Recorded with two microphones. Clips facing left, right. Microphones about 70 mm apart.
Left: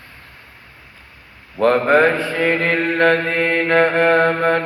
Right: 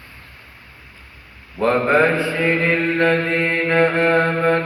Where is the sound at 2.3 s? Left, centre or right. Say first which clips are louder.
Left 1 dB; left.